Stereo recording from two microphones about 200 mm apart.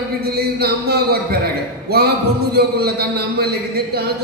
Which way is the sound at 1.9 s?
50° right (ahead or behind).